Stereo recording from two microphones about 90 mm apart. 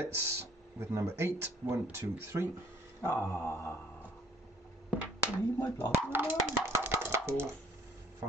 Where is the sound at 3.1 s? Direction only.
20° left (ahead or behind).